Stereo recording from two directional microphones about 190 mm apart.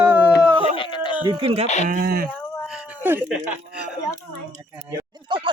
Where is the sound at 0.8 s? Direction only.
25° left (ahead or behind).